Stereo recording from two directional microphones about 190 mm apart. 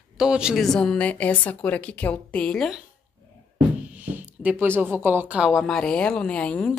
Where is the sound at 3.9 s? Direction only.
10° right (ahead or behind).